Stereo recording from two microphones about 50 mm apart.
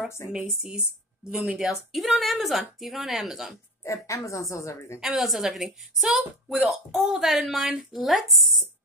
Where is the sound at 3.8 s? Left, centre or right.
Left.